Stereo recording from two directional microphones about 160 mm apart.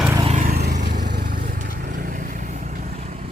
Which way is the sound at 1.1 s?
80° right.